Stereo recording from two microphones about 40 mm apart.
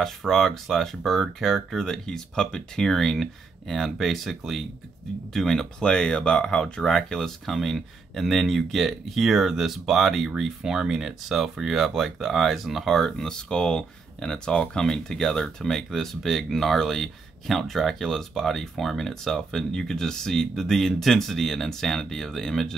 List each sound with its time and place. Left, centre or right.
0.0 s speech: centre
1.8 s speech: centre
5.8 s speech: left
14.5 s speech: left
14.8 s speech: centre